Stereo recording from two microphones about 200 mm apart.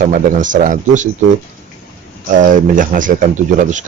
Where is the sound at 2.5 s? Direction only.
40° right (ahead or behind).